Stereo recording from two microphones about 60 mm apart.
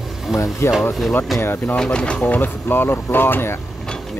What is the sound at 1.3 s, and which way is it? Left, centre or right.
Speech, left.